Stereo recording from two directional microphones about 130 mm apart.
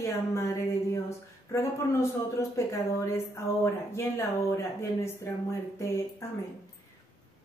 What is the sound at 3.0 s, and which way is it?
A woman's voice, 20° left (ahead or behind).